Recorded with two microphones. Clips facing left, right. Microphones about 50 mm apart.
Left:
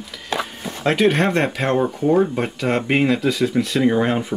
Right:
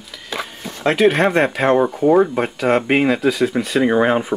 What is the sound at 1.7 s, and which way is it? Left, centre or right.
Speech, centre.